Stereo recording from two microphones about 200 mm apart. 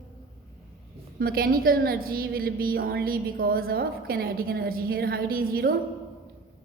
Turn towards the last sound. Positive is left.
turn(degrees=-45)  # may be behind; listen again after turning